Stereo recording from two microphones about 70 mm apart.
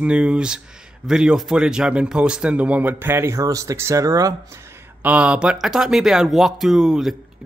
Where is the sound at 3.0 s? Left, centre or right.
Right.